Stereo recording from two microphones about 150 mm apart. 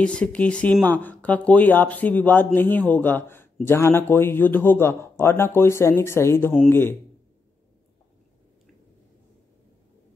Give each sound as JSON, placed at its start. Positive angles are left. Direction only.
{"t": 0.0, "sound": "a man's voice", "side_deg": 10}